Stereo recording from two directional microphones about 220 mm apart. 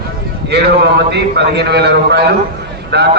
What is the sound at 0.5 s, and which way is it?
A man's voice, 50° right (ahead or behind).